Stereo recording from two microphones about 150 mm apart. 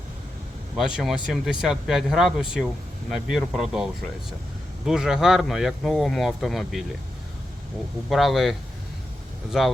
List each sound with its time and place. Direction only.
0.8 s speech: 5° right (ahead or behind)
4.9 s speech: 5° right (ahead or behind)
8.1 s speech: centre (ahead or behind)
9.5 s speech: 5° right (ahead or behind)